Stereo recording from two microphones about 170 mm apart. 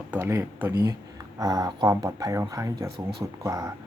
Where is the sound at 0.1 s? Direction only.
15° right (ahead or behind).